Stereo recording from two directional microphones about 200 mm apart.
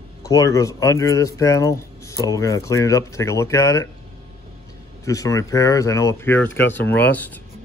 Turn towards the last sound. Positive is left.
turn(degrees=10)  # may be behind; listen again after turning